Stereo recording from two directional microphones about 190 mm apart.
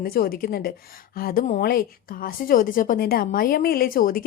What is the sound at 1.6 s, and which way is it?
A woman's voice, 55° left (ahead or behind).